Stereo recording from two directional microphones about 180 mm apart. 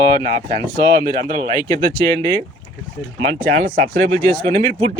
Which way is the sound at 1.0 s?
25° left (ahead or behind).